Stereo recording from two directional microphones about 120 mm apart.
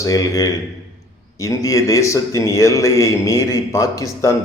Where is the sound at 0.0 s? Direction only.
30° left (ahead or behind).